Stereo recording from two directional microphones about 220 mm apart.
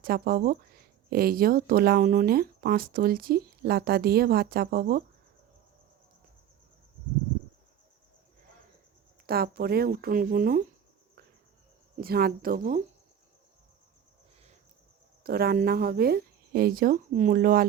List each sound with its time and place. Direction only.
0.0 s speech: 40° right (ahead or behind)
9.2 s speech: 45° right (ahead or behind)
11.9 s speech: 45° right (ahead or behind)
15.2 s speech: 45° right (ahead or behind)